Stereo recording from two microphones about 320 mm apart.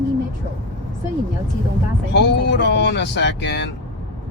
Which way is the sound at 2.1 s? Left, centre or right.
Left.